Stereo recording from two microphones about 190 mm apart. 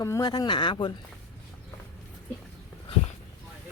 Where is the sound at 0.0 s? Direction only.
20° left (ahead or behind).